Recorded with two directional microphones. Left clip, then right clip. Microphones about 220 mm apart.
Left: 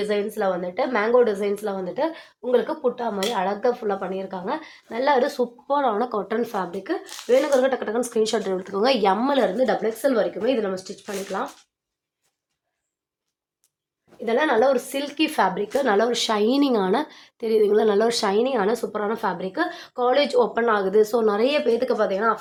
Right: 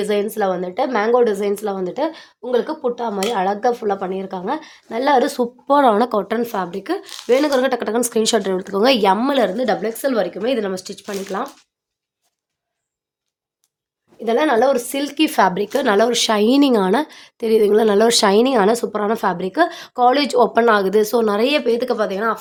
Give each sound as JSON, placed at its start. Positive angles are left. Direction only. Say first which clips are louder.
{"t": 0.0, "sound": "a woman's voice", "louder": "right 4 dB", "side_deg": -50}
{"t": 14.3, "sound": "a woman's voice", "louder": "right 4 dB", "side_deg": -50}